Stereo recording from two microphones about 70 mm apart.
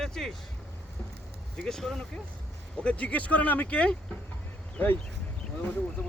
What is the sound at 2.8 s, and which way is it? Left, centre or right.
Speech, centre.